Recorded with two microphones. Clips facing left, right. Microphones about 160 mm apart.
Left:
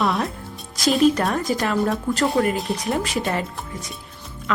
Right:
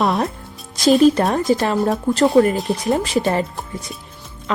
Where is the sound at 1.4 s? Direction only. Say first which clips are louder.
Right 4 dB; 25° right (ahead or behind).